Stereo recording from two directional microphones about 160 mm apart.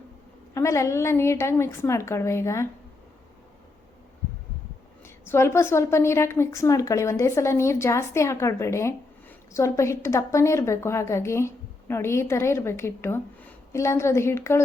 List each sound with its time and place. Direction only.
0.5 s a woman's voice: 20° left (ahead or behind)
5.0 s a woman's voice: 15° left (ahead or behind)